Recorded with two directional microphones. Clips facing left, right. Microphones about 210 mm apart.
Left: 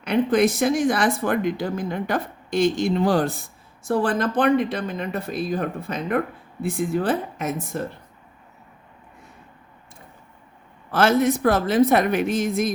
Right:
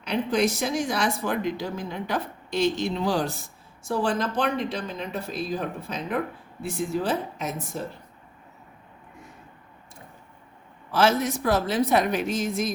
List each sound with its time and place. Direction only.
0.0 s speech: 55° left (ahead or behind)
10.9 s speech: 55° left (ahead or behind)